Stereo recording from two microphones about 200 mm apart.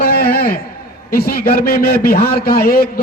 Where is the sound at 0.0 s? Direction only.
50° left (ahead or behind).